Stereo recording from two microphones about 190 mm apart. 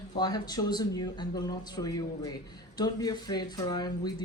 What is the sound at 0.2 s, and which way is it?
Speech, 20° left (ahead or behind).